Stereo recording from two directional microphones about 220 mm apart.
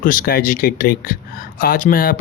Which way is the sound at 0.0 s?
40° left (ahead or behind).